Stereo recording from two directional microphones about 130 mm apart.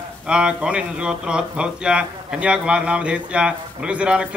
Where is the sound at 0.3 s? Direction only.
5° right (ahead or behind).